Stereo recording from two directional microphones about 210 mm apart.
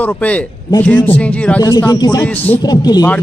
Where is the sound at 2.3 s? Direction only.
10° left (ahead or behind).